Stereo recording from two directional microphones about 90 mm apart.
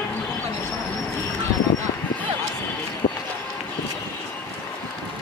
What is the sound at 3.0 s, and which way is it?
Run, 80° left.